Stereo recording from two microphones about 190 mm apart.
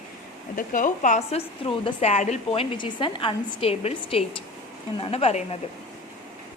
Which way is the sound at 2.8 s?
25° left (ahead or behind).